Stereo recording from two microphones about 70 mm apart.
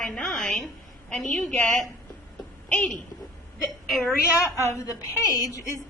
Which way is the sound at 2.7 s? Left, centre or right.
Centre.